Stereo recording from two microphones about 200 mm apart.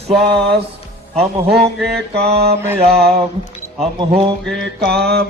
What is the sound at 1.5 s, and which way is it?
Music, 55° right (ahead or behind).